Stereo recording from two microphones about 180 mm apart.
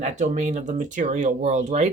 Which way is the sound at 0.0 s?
40° right (ahead or behind).